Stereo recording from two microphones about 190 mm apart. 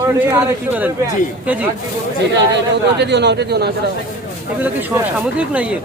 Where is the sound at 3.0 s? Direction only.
65° right (ahead or behind).